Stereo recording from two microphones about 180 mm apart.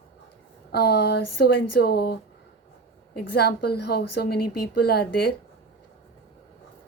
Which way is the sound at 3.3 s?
60° left (ahead or behind).